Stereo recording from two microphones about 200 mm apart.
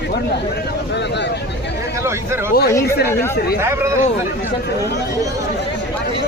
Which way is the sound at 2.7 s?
15° left (ahead or behind).